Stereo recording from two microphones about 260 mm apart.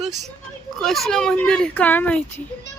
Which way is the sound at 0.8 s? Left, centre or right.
Centre.